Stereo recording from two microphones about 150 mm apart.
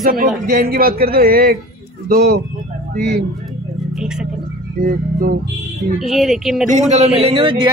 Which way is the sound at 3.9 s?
5° right (ahead or behind).